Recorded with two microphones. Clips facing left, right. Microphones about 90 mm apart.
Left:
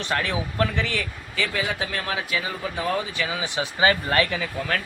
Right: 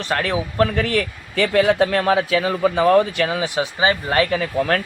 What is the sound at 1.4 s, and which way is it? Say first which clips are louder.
Speech: right 11 dB; 90° right.